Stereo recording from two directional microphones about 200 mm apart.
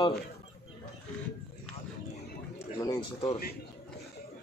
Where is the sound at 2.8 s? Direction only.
25° left (ahead or behind).